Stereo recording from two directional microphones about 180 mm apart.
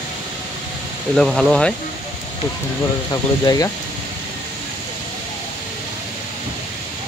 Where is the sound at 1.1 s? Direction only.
Centre (ahead or behind).